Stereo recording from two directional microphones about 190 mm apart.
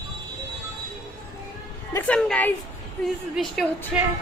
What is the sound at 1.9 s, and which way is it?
A woman's voice, 10° left (ahead or behind).